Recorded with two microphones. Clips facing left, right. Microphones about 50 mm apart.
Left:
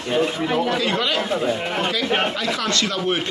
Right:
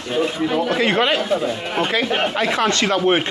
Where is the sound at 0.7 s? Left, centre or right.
Right.